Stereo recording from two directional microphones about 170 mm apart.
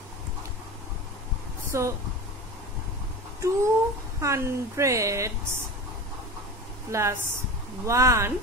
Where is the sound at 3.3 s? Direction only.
15° right (ahead or behind).